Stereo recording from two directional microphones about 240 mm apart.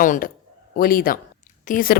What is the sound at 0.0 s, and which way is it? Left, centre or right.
A woman's voice, left.